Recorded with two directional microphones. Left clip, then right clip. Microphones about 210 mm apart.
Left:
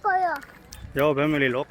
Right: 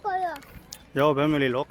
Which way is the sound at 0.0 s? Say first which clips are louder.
Left 5 dB; 5° left (ahead or behind).